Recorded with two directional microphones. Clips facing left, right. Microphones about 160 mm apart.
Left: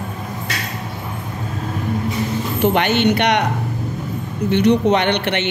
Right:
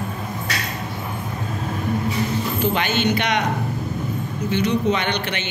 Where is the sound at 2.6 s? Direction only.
65° left (ahead or behind).